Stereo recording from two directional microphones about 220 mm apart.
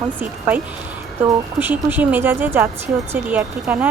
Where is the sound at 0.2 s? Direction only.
10° right (ahead or behind).